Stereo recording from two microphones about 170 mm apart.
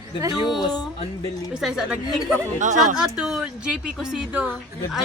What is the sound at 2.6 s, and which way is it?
Speech, 45° right (ahead or behind).